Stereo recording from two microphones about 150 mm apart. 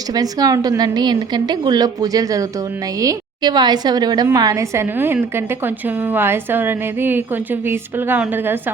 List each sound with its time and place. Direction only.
0.1 s a woman's voice: 25° right (ahead or behind)